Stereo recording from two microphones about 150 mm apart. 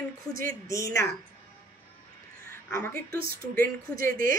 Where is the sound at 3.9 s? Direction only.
70° right (ahead or behind).